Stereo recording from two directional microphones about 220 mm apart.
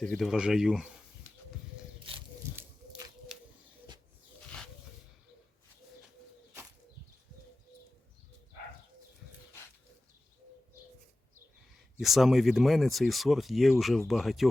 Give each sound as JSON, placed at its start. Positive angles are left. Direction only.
{"t": 0.0, "sound": "speech", "side_deg": 0}
{"t": 2.1, "sound": "a sound", "side_deg": -25}
{"t": 3.3, "sound": "bird", "side_deg": 0}
{"t": 11.9, "sound": "speech", "side_deg": 0}